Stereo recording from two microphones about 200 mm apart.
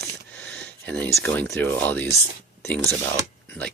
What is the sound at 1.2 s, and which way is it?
Speech, 10° left (ahead or behind).